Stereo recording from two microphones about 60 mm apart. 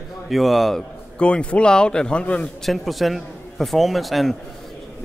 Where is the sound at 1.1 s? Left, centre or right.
Centre.